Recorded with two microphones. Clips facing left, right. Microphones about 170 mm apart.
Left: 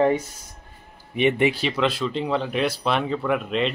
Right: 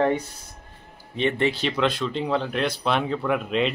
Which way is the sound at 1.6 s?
5° left (ahead or behind).